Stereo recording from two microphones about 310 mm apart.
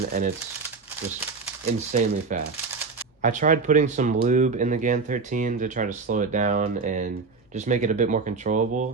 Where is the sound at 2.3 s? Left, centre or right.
Right.